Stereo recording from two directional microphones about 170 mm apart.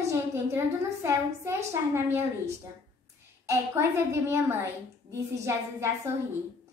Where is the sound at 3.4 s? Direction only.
15° right (ahead or behind).